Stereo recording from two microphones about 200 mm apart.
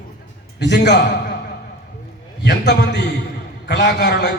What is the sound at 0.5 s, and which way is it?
Speech, 60° left (ahead or behind).